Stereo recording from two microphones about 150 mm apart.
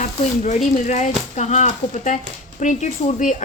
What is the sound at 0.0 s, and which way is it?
Speech, 55° left (ahead or behind).